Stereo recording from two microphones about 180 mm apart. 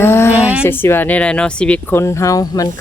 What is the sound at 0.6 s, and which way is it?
Speech, 10° left (ahead or behind).